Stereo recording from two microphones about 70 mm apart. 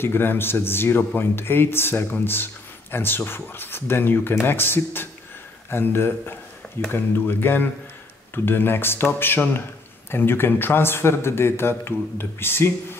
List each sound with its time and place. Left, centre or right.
0.0 s speech: left